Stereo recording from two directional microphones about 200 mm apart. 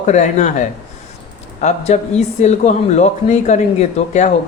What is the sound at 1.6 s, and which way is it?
Speech, 35° left (ahead or behind).